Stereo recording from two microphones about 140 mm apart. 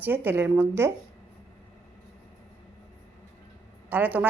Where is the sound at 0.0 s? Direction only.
15° right (ahead or behind).